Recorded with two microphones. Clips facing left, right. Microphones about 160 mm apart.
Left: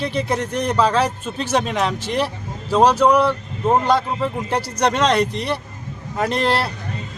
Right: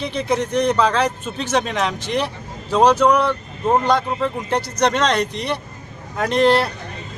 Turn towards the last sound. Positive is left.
turn(degrees=5)  # may be behind; listen again after turning